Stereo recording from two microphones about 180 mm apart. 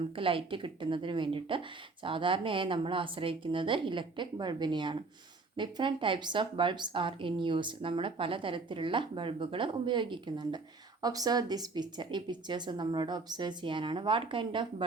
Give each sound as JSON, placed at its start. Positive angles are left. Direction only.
{"t": 0.2, "sound": "speech", "side_deg": -30}